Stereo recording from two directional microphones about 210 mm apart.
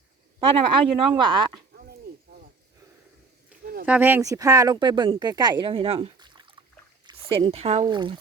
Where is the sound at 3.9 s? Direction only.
10° right (ahead or behind).